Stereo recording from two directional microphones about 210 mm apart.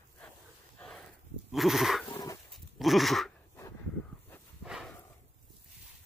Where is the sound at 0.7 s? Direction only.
5° left (ahead or behind).